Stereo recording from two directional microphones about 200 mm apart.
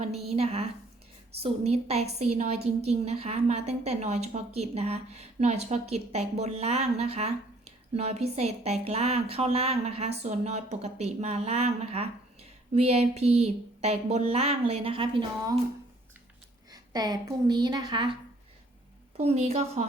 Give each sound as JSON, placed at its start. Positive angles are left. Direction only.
{"t": 0.2, "sound": "a woman's voice", "side_deg": -30}
{"t": 16.7, "sound": "a woman's voice", "side_deg": -20}
{"t": 19.1, "sound": "a woman's voice", "side_deg": -30}